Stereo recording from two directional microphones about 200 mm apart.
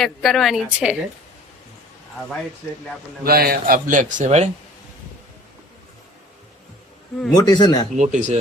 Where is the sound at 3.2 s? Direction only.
50° right (ahead or behind).